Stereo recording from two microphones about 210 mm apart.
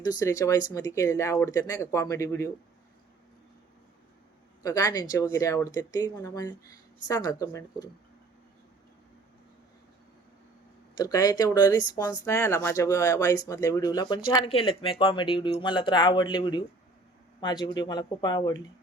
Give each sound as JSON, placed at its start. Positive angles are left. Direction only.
{"t": 0.0, "sound": "speech", "side_deg": 15}
{"t": 4.6, "sound": "speech", "side_deg": 15}
{"t": 10.9, "sound": "speech", "side_deg": 15}